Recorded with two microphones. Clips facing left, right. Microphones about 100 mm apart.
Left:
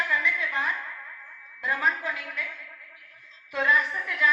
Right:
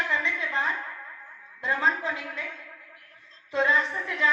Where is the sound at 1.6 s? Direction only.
25° right (ahead or behind).